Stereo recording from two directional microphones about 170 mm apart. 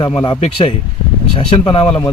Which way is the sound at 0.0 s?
30° left (ahead or behind).